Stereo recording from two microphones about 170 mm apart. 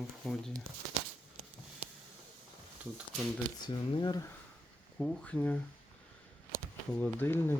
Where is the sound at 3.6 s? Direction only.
25° left (ahead or behind).